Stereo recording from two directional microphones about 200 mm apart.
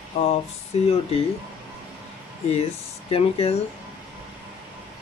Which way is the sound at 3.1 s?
30° left (ahead or behind).